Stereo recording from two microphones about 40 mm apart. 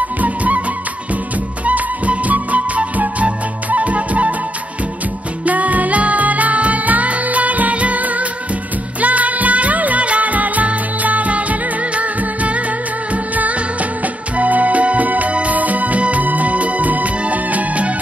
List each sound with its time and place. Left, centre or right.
0.2 s music: right
1.7 s music: right
5.4 s music: right